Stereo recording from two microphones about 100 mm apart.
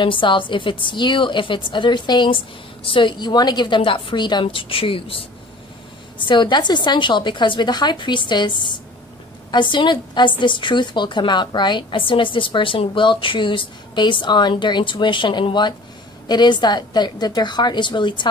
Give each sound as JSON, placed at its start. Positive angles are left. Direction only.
{"t": 0.0, "sound": "a woman's voice", "side_deg": 55}
{"t": 6.1, "sound": "a woman's voice", "side_deg": 55}